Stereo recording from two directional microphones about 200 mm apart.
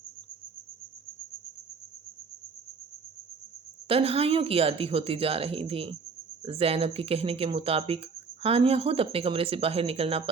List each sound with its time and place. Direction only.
3.8 s speech: 30° right (ahead or behind)